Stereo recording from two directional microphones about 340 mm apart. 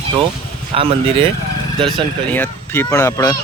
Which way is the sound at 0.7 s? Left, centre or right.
Centre.